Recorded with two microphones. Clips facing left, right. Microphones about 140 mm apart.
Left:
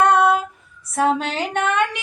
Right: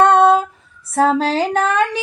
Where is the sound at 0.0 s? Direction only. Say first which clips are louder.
Right 4 dB; 25° right (ahead or behind).